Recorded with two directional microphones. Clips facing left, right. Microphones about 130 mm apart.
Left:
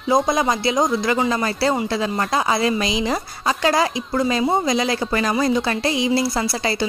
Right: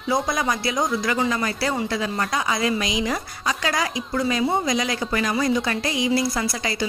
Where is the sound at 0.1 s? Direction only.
25° left (ahead or behind).